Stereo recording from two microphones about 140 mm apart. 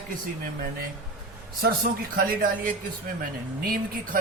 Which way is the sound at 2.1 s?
85° right.